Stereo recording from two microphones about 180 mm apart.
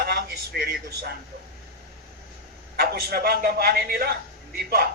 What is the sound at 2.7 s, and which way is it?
A man's voice, 60° right (ahead or behind).